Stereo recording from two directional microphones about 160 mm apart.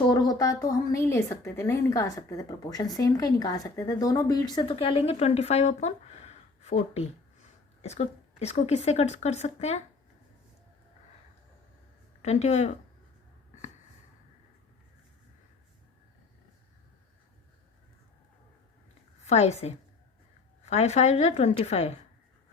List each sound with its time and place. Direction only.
0.1 s a woman's voice: 25° left (ahead or behind); by 9.8 s 45° left (ahead or behind)
12.2 s a woman's voice: 45° left (ahead or behind)
19.2 s a woman's voice: 45° left (ahead or behind)